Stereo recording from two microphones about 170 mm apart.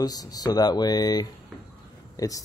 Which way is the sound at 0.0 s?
20° left (ahead or behind).